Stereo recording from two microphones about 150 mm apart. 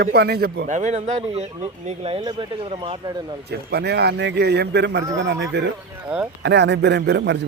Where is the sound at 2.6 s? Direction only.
40° right (ahead or behind).